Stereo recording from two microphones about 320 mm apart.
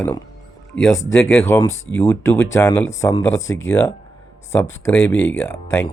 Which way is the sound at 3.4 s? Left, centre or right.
Left.